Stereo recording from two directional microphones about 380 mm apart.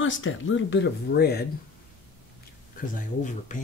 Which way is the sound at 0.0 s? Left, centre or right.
Left.